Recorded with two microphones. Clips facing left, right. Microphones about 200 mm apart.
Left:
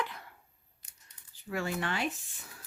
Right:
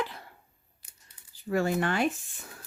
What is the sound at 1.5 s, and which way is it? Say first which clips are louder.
Speech: right 7 dB; 45° right (ahead or behind).